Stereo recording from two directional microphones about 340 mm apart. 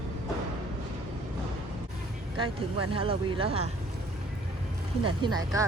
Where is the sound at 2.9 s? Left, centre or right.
Centre.